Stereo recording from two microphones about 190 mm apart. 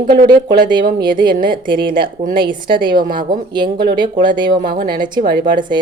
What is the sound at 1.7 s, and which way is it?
A woman's voice, 25° right (ahead or behind).